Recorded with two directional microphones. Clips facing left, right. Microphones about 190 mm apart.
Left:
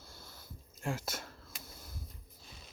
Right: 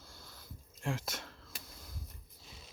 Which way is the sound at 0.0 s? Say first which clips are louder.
Left 1 dB; 5° left (ahead or behind).